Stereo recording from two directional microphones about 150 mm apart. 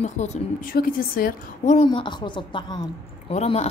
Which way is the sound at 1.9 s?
30° left (ahead or behind).